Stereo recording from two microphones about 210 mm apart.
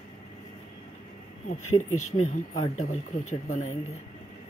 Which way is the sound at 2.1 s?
35° left (ahead or behind).